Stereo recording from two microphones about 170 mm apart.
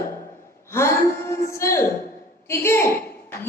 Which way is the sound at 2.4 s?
15° left (ahead or behind).